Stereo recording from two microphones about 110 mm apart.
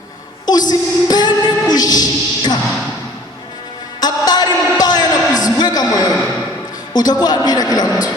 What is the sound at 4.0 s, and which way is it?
Music, 35° left (ahead or behind).